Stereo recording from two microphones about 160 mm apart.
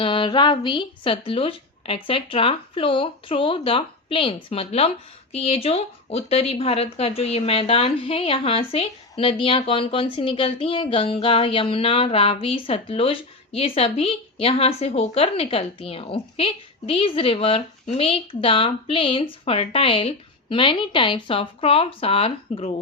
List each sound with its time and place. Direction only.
0.0 s speech: 30° left (ahead or behind)